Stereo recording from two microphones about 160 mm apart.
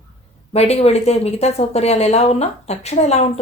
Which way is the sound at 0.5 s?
40° left (ahead or behind).